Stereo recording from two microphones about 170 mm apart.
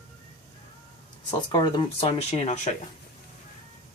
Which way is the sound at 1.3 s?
25° left (ahead or behind).